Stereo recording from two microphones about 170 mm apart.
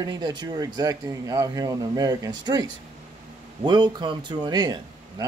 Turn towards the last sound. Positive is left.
turn(degrees=-25)  # may be behind; listen again after turning